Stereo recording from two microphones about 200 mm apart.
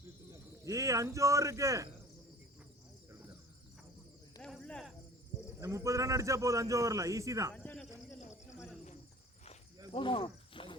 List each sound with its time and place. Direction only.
0.3 s speech: 15° right (ahead or behind)
4.4 s snake: 5° left (ahead or behind)
5.5 s a man's voice: 15° right (ahead or behind)
7.5 s a sound: 5° left (ahead or behind)
9.9 s cricket: 25° left (ahead or behind)